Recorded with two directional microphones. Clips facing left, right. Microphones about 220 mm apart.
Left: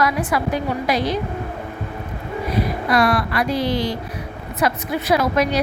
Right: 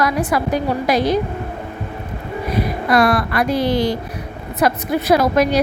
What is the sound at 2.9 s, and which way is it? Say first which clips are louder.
A woman's voice: right 3 dB; 50° right (ahead or behind).